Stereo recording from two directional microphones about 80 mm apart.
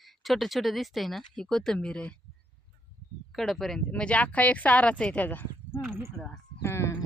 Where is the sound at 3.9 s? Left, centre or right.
Centre.